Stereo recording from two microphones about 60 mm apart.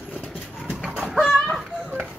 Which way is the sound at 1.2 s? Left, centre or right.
Centre.